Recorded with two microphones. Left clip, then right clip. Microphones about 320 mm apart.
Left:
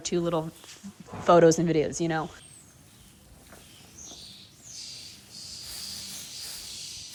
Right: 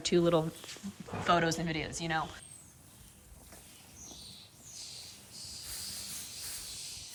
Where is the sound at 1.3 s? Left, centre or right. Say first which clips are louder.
Left 11 dB; left.